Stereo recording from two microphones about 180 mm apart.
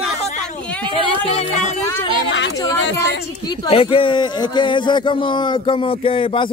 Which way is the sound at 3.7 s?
30° left (ahead or behind).